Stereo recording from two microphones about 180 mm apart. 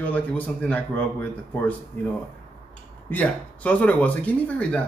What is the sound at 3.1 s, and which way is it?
Speech, 10° left (ahead or behind).